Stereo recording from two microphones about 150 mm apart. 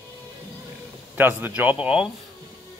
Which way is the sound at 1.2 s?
10° right (ahead or behind).